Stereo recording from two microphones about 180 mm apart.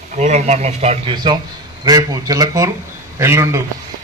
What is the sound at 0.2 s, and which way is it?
A man's voice, 40° right (ahead or behind).